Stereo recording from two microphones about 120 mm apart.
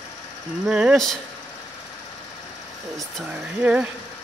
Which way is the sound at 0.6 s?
5° right (ahead or behind).